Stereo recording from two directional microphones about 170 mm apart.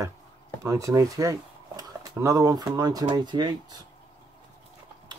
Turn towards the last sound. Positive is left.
turn(degrees=-25)  # may be behind; listen again after turning